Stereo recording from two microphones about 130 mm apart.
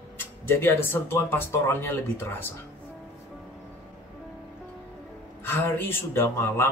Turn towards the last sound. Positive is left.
turn(degrees=20)  # may be behind; listen again after turning